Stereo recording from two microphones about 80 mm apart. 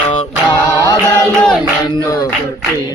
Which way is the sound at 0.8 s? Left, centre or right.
Left.